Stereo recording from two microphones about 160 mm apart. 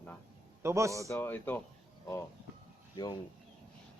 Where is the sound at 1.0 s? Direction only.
10° left (ahead or behind).